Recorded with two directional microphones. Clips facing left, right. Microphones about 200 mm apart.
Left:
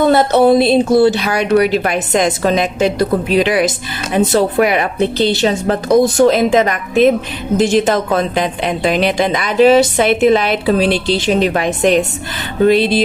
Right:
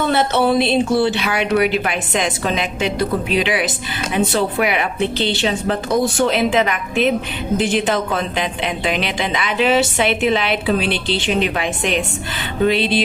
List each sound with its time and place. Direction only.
0.0 s speech: 40° left (ahead or behind)